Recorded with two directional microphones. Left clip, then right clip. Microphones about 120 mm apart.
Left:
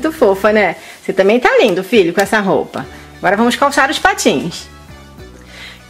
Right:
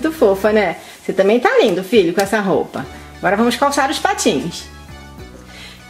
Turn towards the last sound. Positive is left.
turn(degrees=40)  # may be behind; listen again after turning